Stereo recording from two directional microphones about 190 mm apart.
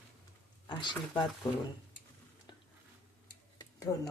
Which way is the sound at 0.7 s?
25° left (ahead or behind).